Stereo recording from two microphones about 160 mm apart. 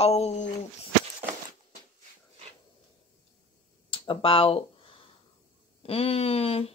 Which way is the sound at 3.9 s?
35° left (ahead or behind).